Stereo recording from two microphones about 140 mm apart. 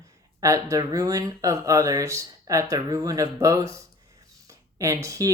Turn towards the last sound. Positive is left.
turn(degrees=-25)  # may be behind; listen again after turning